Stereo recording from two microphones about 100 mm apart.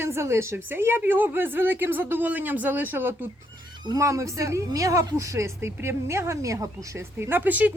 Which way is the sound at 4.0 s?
30° right (ahead or behind).